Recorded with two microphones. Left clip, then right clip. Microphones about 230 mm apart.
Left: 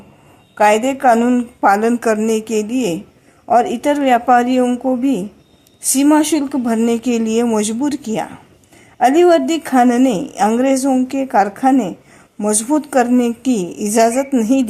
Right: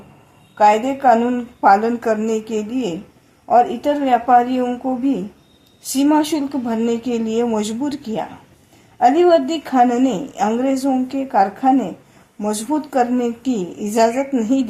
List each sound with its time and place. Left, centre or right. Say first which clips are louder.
0.5 s a woman's voice: left 1 dB; left